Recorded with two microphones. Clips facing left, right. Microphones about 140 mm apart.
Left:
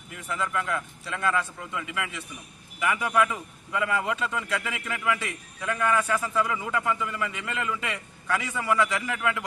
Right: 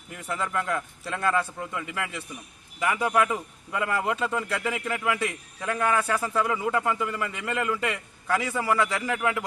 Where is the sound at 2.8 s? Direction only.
35° right (ahead or behind).